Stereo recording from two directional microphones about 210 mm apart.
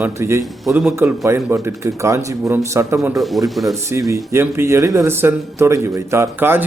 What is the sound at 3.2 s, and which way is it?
Speech, centre (ahead or behind).